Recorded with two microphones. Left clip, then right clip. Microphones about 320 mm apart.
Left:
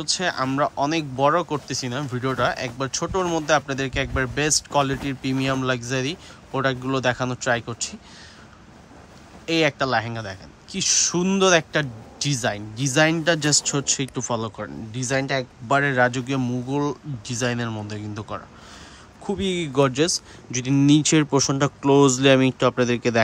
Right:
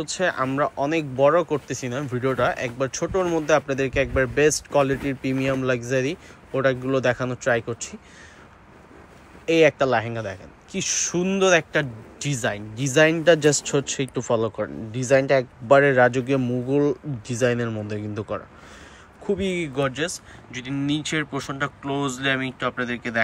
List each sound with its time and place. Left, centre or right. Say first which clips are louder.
0.0 s speech: even; centre
9.5 s speech: right 3 dB; centre